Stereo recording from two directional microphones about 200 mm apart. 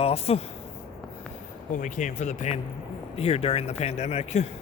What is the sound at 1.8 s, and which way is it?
Speech, 40° left (ahead or behind).